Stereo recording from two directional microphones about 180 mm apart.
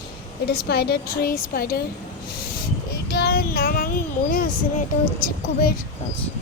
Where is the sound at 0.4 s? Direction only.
60° left (ahead or behind).